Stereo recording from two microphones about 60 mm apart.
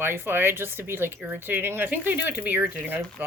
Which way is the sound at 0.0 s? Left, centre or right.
Right.